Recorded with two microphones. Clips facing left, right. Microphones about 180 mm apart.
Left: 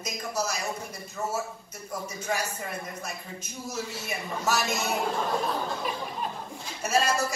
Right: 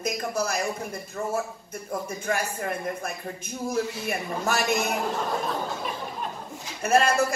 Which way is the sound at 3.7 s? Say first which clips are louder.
Right 6 dB; 55° right (ahead or behind).